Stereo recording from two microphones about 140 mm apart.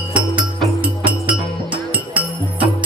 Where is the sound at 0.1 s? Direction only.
10° right (ahead or behind).